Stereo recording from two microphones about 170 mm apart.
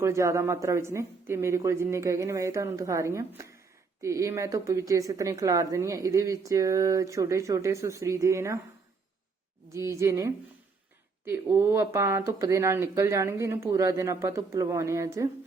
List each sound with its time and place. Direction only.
0.0 s a woman's voice: 15° right (ahead or behind)
9.7 s speech: 15° right (ahead or behind)